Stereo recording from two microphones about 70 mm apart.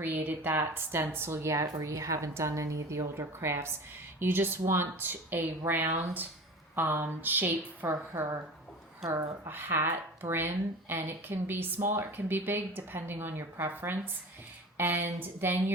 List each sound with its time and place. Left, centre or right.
0.0 s a woman's voice: right
8.1 s speech: right
9.0 s a woman's voice: right
9.5 s a woman's voice: right